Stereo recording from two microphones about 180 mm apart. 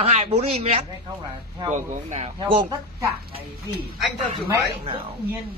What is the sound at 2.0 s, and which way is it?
Speech, 35° right (ahead or behind).